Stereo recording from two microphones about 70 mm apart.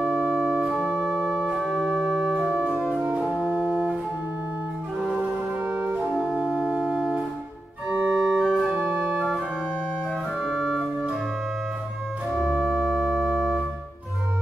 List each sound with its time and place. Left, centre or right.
0.0 s organ: centre
5.7 s music: centre
6.2 s organ: centre
8.8 s organ: centre
10.4 s organ: centre
12.4 s music: centre